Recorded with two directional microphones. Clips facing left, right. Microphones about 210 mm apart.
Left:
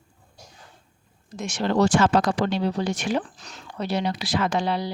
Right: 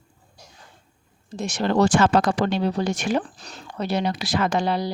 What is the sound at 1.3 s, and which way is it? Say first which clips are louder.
Speech: right 2 dB; 35° right (ahead or behind).